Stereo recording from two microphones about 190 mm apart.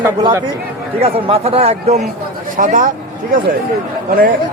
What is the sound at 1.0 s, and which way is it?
Speech, 30° right (ahead or behind).